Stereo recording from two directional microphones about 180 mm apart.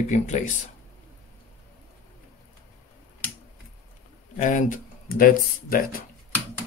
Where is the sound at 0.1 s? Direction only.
40° left (ahead or behind).